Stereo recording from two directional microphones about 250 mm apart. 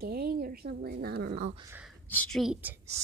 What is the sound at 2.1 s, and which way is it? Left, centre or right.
Speech, centre.